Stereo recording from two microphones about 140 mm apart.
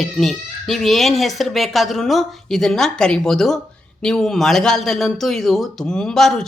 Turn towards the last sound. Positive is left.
turn(degrees=5)  # may be behind; listen again after turning